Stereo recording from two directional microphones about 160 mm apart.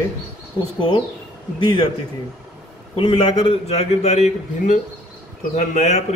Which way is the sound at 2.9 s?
35° left (ahead or behind).